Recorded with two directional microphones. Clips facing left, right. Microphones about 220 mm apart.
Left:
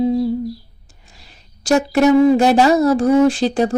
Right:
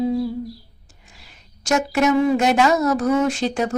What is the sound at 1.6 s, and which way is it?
Speech, 35° left (ahead or behind).